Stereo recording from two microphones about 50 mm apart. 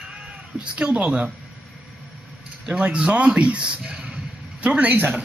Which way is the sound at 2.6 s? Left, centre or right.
Right.